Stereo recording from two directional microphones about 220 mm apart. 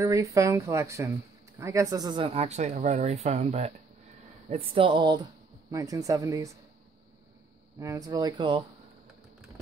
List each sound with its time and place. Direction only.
0.0 s speech: 15° right (ahead or behind)
7.8 s speech: 15° right (ahead or behind)